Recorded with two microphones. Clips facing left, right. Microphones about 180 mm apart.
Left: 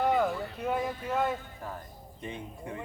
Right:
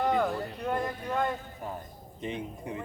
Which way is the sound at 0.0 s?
5° left (ahead or behind).